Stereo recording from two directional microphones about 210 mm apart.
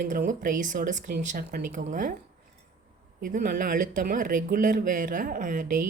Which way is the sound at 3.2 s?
40° right (ahead or behind).